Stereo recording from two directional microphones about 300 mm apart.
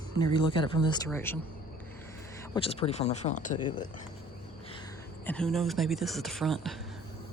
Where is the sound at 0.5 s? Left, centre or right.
Centre.